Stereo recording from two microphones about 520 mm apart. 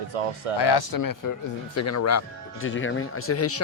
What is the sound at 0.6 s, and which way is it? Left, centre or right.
Speech, left.